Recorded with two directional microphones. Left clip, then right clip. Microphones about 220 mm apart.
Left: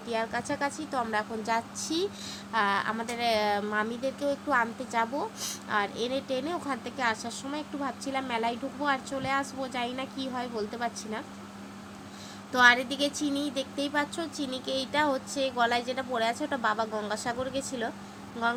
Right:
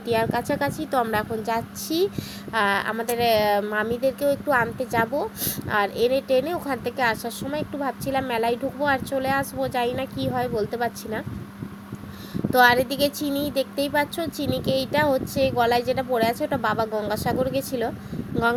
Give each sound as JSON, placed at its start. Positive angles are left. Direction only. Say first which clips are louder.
{"t": 0.1, "sound": "a woman's voice", "louder": "right 8 dB", "side_deg": -15}
{"t": 12.5, "sound": "a woman's voice", "louder": "right 4 dB", "side_deg": -15}